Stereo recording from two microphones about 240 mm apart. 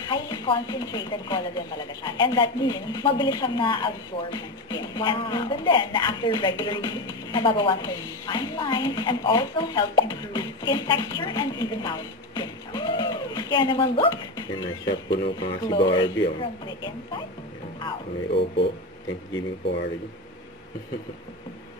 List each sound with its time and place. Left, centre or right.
0.0 s speech: centre
18.3 s speech: left